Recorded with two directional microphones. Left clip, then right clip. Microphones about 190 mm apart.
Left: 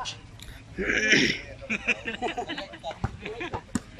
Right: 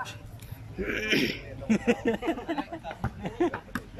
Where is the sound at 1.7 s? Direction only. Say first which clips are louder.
Right 2 dB; 40° right (ahead or behind).